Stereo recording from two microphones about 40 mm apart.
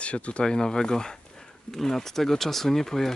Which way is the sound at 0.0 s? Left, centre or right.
Left.